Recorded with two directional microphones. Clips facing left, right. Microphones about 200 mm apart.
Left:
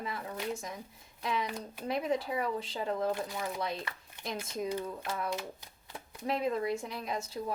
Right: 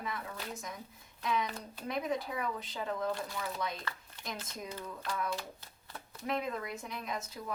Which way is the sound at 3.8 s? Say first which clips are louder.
Left 2 dB; 25° left (ahead or behind).